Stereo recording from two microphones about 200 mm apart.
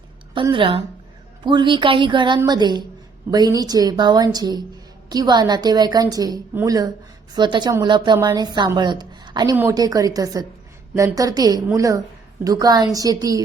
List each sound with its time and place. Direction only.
0.3 s a woman's voice: 25° right (ahead or behind)